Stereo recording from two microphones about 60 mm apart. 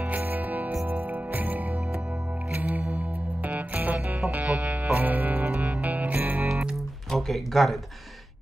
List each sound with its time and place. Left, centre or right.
0.1 s music: right
7.1 s speech: centre